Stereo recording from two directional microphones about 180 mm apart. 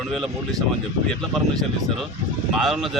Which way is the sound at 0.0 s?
Centre (ahead or behind).